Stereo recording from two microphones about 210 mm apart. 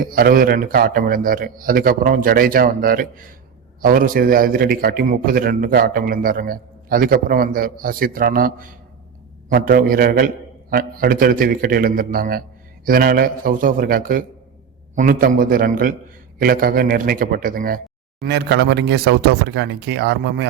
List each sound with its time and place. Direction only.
0.0 s a man's voice: 45° right (ahead or behind)